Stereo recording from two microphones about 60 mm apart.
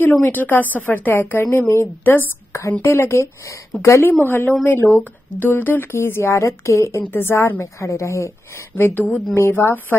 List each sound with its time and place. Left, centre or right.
0.0 s speech: left
1.4 s a woman's voice: left
2.8 s a woman's voice: left
4.2 s speech: left
7.0 s speech: left
7.6 s a woman's voice: left
8.7 s speech: left
9.4 s a woman's voice: left